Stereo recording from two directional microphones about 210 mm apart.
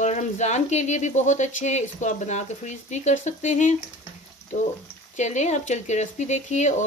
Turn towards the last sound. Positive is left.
turn(degrees=35)  # may be behind; listen again after turning